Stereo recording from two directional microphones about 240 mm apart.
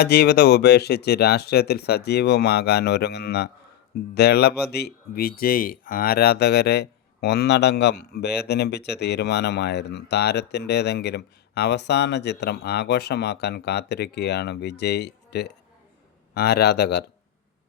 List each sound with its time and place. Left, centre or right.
0.0 s speech: left